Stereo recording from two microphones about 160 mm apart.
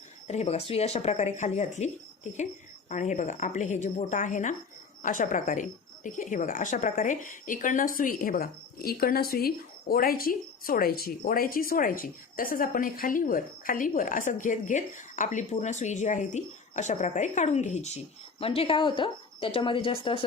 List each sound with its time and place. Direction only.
0.3 s a woman's voice: 40° left (ahead or behind)